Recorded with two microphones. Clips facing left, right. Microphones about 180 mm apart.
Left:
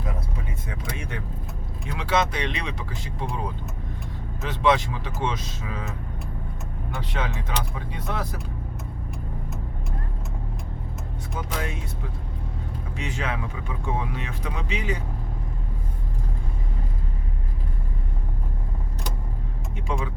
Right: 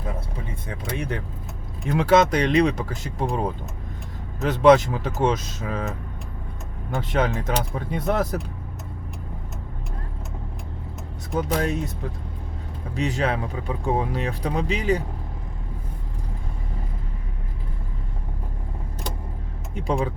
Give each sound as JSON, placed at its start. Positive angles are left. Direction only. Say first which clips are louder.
{"t": 0.7, "sound": "speech", "louder": "right 6 dB", "side_deg": -35}
{"t": 1.9, "sound": "speech", "louder": "right 7 dB", "side_deg": -45}
{"t": 6.9, "sound": "speech", "louder": "right 8 dB", "side_deg": -45}
{"t": 11.3, "sound": "speech", "louder": "right 8 dB", "side_deg": -40}
{"t": 13.0, "sound": "speech", "louder": "right 7 dB", "side_deg": -35}
{"t": 19.7, "sound": "speech", "louder": "right 6 dB", "side_deg": -35}